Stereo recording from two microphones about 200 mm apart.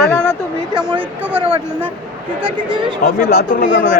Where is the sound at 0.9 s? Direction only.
5° right (ahead or behind).